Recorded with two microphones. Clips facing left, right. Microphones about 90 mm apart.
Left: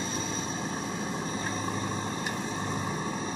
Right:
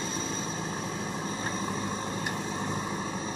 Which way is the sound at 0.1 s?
5° left (ahead or behind).